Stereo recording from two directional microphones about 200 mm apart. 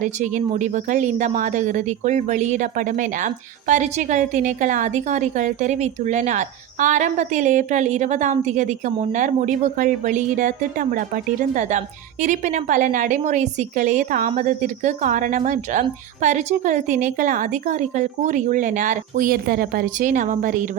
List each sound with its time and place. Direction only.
0.0 s a woman's voice: 40° right (ahead or behind)